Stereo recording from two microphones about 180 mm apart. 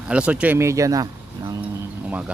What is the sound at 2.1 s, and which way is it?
Speech, 10° right (ahead or behind).